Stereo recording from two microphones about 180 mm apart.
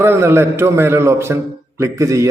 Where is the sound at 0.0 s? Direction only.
15° right (ahead or behind).